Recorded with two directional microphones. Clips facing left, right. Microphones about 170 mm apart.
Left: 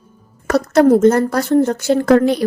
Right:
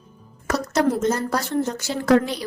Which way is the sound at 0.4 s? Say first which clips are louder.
Left 9 dB; 55° left (ahead or behind).